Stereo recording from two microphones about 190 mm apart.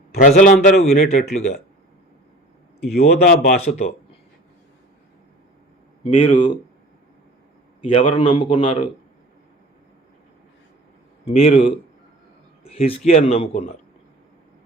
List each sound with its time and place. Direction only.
0.1 s a man's voice: 40° left (ahead or behind)
3.0 s a man's voice: 40° left (ahead or behind)
6.1 s a man's voice: 25° left (ahead or behind)
7.8 s a man's voice: 30° left (ahead or behind)
11.3 s a man's voice: 35° left (ahead or behind)